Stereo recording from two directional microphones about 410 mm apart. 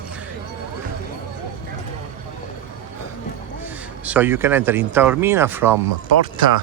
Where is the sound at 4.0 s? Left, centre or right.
Centre.